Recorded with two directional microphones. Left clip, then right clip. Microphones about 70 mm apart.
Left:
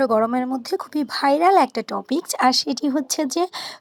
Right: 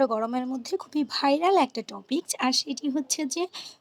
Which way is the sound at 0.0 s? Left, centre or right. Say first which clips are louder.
Left 6 dB; centre.